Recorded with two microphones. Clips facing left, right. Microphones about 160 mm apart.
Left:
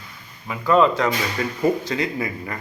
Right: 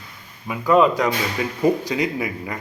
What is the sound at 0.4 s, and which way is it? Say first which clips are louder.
Speech: right 1 dB; 10° right (ahead or behind).